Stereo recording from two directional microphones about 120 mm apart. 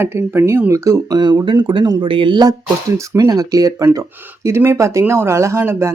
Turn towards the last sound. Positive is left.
turn(degrees=-20)  # may be behind; listen again after turning